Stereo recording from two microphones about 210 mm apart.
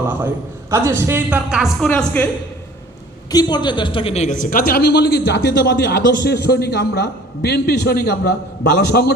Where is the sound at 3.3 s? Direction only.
20° left (ahead or behind).